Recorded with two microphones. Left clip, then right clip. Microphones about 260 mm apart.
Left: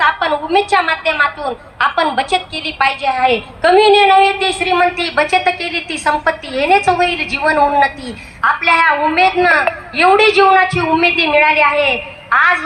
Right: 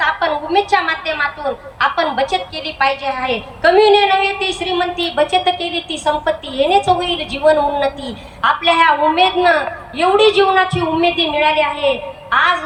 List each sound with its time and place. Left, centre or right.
0.0 s a woman's voice: centre